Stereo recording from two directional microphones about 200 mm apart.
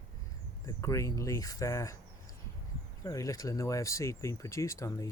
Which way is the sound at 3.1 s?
15° left (ahead or behind).